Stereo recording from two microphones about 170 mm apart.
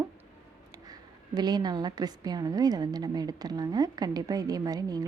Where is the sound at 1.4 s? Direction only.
25° right (ahead or behind).